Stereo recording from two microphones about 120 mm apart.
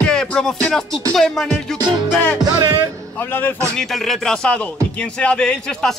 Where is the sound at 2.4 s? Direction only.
35° right (ahead or behind).